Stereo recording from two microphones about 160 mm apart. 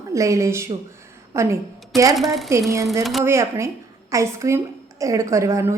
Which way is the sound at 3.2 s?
15° right (ahead or behind).